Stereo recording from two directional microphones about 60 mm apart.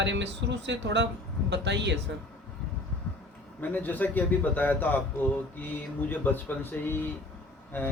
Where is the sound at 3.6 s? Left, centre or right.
Left.